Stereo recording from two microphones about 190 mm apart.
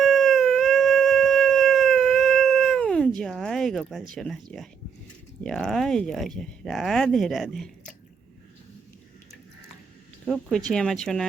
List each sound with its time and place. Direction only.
0.0 s howl: centre (ahead or behind)
4.1 s speech: centre (ahead or behind)
5.4 s speech: centre (ahead or behind)
10.2 s speech: centre (ahead or behind)